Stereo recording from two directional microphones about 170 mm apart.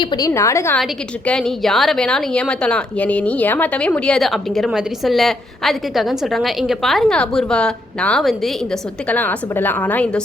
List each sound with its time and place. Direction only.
0.0 s a woman's voice: 25° left (ahead or behind)
1.3 s a woman's voice: 5° left (ahead or behind)